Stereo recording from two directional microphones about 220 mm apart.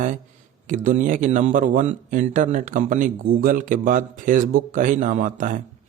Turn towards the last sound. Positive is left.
turn(degrees=-35)  # may be behind; listen again after turning